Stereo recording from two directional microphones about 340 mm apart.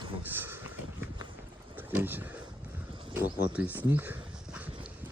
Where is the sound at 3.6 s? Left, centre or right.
Centre.